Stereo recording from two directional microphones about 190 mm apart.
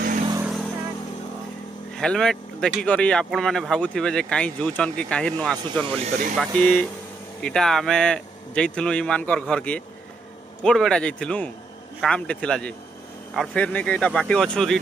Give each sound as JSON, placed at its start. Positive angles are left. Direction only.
{"t": 0.4, "sound": "vehicle", "side_deg": 0}
{"t": 2.0, "sound": "speech", "side_deg": 5}
{"t": 5.9, "sound": "speech", "side_deg": -35}
{"t": 6.6, "sound": "speech", "side_deg": 5}